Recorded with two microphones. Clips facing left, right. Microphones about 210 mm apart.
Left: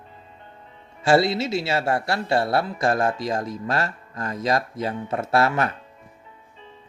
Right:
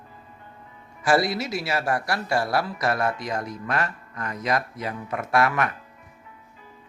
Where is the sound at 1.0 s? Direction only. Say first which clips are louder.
Left 3 dB; 25° left (ahead or behind).